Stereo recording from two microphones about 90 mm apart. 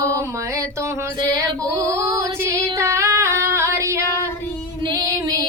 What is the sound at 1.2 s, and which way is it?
Female singing, 40° right (ahead or behind).